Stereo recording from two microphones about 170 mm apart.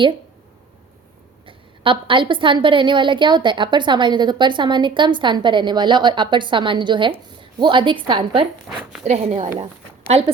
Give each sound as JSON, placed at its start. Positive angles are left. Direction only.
{"t": 1.5, "sound": "a woman's voice", "side_deg": -30}